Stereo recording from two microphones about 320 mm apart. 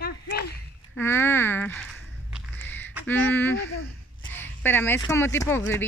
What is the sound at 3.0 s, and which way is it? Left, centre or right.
A woman's voice, centre.